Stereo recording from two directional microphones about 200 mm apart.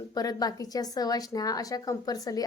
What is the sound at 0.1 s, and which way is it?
A woman's voice, 20° left (ahead or behind).